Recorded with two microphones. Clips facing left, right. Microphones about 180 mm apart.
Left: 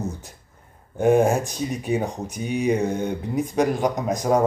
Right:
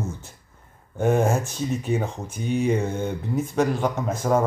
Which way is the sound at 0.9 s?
15° left (ahead or behind).